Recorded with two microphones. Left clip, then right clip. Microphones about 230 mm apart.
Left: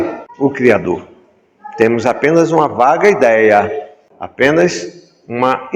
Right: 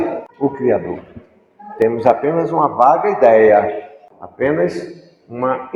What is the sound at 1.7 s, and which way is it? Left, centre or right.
A man's voice, left.